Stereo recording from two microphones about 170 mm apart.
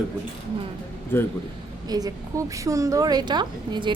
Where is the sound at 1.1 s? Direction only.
15° left (ahead or behind).